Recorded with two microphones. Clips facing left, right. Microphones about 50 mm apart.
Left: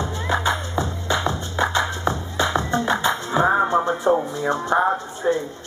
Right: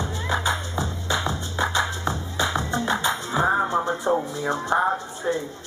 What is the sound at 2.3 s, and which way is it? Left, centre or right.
Music, left.